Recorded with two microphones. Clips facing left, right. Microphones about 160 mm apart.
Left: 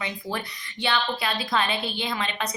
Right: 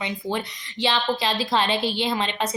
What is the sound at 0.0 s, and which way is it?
A woman's voice, 20° right (ahead or behind).